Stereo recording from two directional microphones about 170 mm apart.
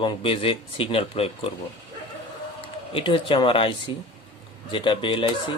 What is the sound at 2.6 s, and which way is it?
Speech, 30° left (ahead or behind).